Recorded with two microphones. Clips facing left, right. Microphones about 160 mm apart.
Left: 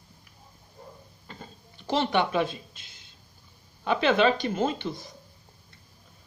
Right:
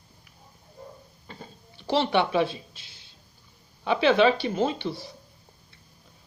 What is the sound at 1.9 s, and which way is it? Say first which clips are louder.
Speech: right 2 dB; 10° right (ahead or behind).